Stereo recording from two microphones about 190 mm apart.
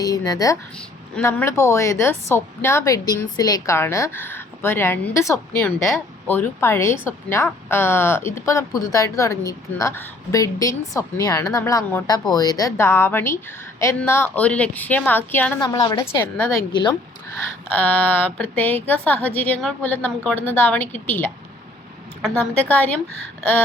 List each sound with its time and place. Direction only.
0.0 s a woman's voice: 20° left (ahead or behind)
15.6 s a woman's voice: 20° left (ahead or behind)
17.7 s a woman's voice: 10° left (ahead or behind)
22.2 s a woman's voice: 5° left (ahead or behind)